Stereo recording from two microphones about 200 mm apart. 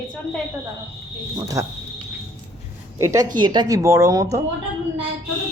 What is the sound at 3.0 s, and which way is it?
Speech, 15° right (ahead or behind).